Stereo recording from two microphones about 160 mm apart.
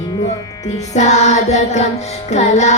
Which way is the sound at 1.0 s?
45° left (ahead or behind).